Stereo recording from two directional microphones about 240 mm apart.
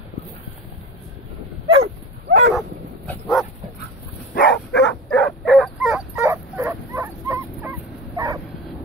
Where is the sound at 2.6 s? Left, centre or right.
Centre.